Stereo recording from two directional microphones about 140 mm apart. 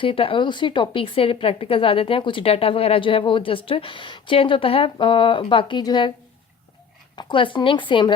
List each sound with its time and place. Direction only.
0.0 s a woman's voice: 40° left (ahead or behind)
7.2 s a woman's voice: 35° left (ahead or behind)